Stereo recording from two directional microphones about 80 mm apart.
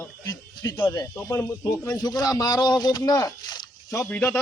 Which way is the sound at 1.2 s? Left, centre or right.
Left.